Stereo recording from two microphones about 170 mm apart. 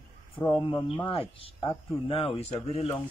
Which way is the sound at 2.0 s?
35° left (ahead or behind).